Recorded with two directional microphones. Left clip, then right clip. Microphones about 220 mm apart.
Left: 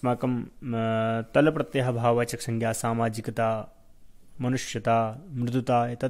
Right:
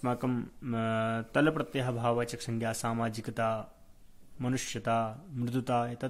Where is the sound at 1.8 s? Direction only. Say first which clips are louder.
Left 7 dB; 25° left (ahead or behind).